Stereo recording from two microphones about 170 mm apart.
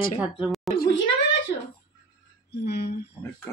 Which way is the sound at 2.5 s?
80° left.